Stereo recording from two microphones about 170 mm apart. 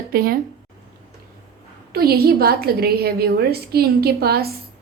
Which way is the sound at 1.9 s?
65° right (ahead or behind).